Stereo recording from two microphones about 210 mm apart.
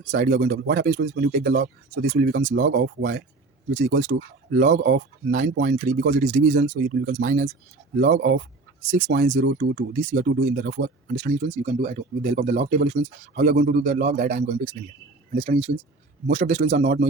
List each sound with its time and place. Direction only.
0.1 s speech: 45° right (ahead or behind)
8.9 s speech: 35° right (ahead or behind)
9.4 s speech: 50° right (ahead or behind)
11.1 s speech: 35° right (ahead or behind)